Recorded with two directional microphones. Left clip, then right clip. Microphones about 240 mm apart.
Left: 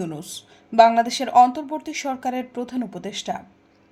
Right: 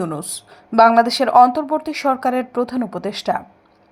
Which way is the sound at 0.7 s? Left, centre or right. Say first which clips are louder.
Right 3 dB; centre.